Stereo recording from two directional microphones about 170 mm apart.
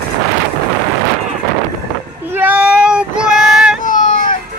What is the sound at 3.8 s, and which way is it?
Baby cry, 50° left (ahead or behind).